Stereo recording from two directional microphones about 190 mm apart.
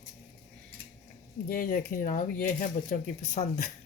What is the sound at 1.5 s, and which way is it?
Speech, 45° left (ahead or behind).